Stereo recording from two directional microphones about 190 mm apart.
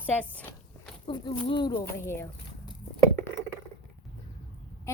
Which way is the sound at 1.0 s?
25° left (ahead or behind).